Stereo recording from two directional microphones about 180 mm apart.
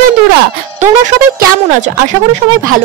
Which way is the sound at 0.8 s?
45° right (ahead or behind).